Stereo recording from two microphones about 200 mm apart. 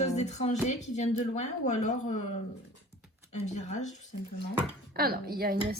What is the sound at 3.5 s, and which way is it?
Speech, 35° left (ahead or behind).